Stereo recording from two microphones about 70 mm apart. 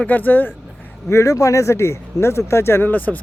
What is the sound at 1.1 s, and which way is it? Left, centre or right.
Speech, left.